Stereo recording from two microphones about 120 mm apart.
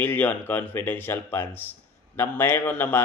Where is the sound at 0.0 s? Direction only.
15° left (ahead or behind).